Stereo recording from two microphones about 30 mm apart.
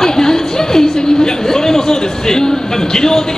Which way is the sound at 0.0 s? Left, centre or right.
Centre.